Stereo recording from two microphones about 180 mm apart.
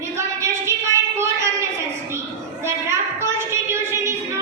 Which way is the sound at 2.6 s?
15° right (ahead or behind).